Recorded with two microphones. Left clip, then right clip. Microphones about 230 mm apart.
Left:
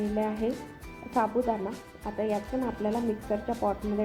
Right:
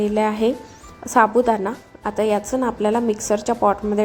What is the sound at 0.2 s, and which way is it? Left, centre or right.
A woman's voice, right.